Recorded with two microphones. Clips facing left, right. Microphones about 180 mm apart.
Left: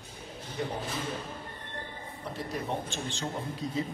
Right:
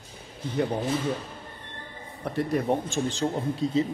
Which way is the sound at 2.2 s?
60° right (ahead or behind).